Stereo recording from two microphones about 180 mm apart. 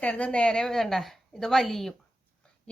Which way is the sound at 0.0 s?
5° left (ahead or behind).